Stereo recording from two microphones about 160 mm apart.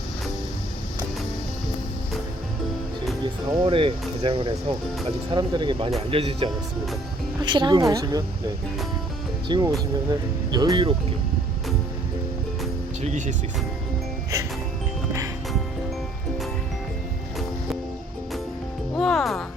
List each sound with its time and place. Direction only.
3.6 s speech: 35° right (ahead or behind)
9.5 s speech: 25° right (ahead or behind)
13.0 s speech: 50° right (ahead or behind)
18.9 s music: centre (ahead or behind)